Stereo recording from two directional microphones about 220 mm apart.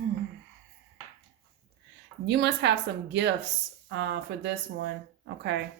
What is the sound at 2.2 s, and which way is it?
A woman's voice, 50° right (ahead or behind).